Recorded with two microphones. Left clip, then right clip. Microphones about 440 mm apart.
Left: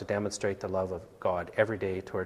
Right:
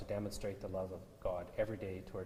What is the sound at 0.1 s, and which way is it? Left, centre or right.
Speech, left.